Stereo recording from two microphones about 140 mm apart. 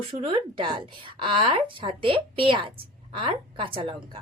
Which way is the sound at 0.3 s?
40° right (ahead or behind).